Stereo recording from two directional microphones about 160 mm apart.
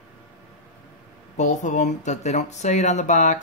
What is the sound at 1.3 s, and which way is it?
Speech, 50° left (ahead or behind).